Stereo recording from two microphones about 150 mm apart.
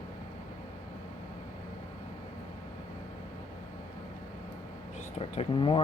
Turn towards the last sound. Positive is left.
turn(degrees=35)  # may be behind; listen again after turning